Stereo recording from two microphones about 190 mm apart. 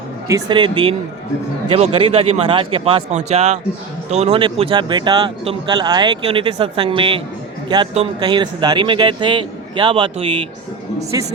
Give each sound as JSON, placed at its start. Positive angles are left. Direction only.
{"t": 0.3, "sound": "speech", "side_deg": -20}